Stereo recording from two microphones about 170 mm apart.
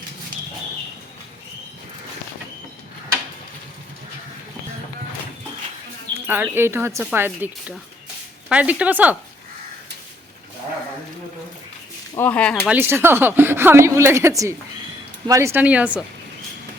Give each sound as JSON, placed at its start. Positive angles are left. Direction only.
{"t": 6.2, "sound": "speech", "side_deg": -10}
{"t": 12.1, "sound": "speech", "side_deg": 10}
{"t": 12.6, "sound": "speech", "side_deg": -10}